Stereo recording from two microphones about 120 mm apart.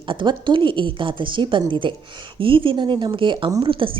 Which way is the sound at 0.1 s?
40° right (ahead or behind).